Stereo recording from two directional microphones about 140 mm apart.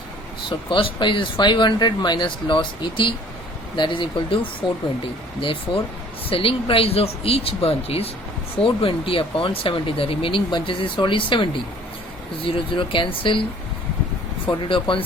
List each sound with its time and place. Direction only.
0.7 s speech: 40° left (ahead or behind)
12.5 s speech: 40° left (ahead or behind)
14.4 s speech: 40° left (ahead or behind)